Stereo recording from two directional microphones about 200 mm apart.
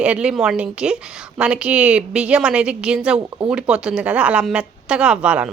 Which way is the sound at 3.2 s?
25° right (ahead or behind).